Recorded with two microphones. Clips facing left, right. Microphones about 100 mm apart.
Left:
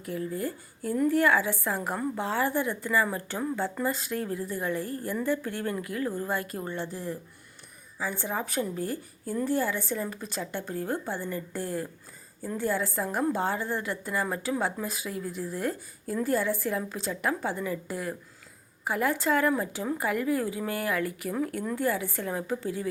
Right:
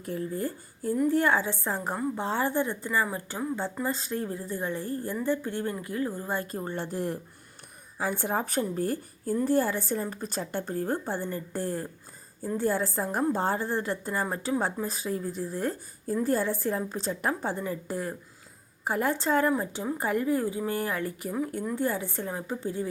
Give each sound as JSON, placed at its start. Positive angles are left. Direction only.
{"t": 0.0, "sound": "a woman's voice", "side_deg": -35}
{"t": 6.1, "sound": "speech", "side_deg": -15}
{"t": 6.4, "sound": "speech", "side_deg": -30}
{"t": 6.7, "sound": "a woman's voice", "side_deg": -50}